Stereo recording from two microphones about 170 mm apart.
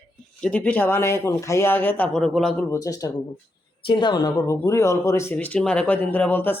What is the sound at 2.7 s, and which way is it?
Speech, 20° left (ahead or behind).